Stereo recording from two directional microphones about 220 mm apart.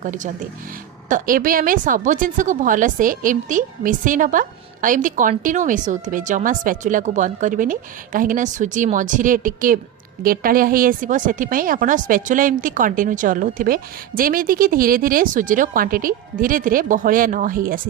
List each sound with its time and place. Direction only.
0.0 s a woman's voice: 35° right (ahead or behind)